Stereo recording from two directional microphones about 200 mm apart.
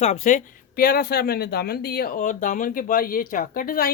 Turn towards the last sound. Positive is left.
turn(degrees=45)  # may be behind; listen again after turning